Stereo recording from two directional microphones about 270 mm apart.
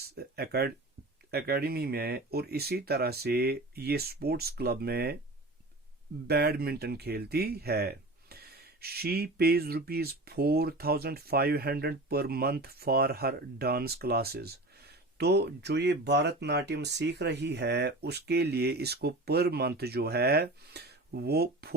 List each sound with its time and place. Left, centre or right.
0.0 s speech: right
6.2 s speech: right